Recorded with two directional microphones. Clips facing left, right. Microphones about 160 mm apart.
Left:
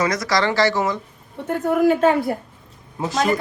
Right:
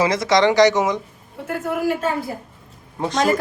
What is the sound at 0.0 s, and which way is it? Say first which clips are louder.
Speech: right 4 dB; 25° right (ahead or behind).